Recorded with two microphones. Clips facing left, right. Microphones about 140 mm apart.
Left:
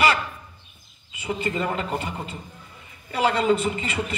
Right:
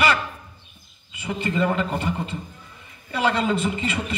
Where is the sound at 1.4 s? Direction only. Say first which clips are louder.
Right 5 dB; 35° left (ahead or behind).